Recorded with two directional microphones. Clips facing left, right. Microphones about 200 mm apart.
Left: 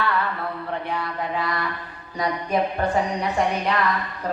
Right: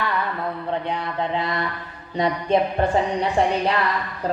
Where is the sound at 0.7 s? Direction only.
20° right (ahead or behind).